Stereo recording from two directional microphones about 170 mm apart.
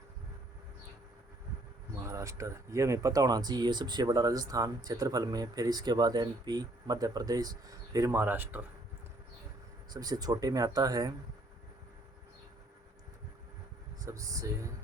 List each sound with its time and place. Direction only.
2.0 s speech: 20° right (ahead or behind)
9.9 s speech: 25° right (ahead or behind)
14.0 s speech: 20° right (ahead or behind)